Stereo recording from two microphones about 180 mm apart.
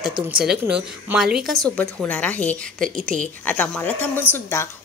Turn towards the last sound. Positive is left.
turn(degrees=15)  # may be behind; listen again after turning